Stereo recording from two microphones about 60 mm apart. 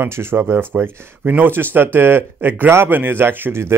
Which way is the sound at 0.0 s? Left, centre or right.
Right.